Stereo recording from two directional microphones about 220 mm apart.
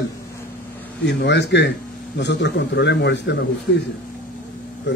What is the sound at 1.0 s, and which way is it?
A man's voice, 50° left (ahead or behind).